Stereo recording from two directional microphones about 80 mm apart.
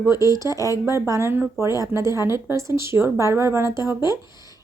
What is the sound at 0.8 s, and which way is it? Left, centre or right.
A woman's voice, right.